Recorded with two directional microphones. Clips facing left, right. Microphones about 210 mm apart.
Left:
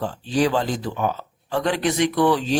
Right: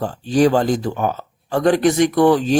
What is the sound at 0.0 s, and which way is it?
Speech, 45° right (ahead or behind).